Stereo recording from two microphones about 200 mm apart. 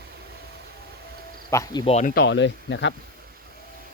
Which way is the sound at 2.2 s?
65° left (ahead or behind).